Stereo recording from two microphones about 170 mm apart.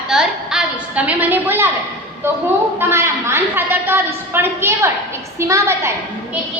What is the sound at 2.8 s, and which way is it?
A woman's voice, 15° right (ahead or behind).